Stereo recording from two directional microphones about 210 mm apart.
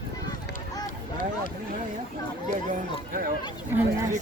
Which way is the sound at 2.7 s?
40° right (ahead or behind).